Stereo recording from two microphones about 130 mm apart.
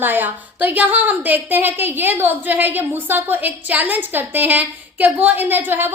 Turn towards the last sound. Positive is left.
turn(degrees=-15)  # may be behind; listen again after turning